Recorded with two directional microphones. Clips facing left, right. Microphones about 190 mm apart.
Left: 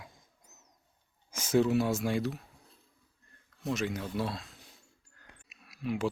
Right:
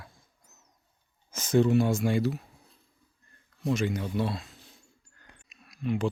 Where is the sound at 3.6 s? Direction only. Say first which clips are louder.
Right 5 dB; centre (ahead or behind).